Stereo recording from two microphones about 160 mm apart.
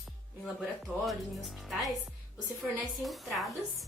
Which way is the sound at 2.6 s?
10° right (ahead or behind).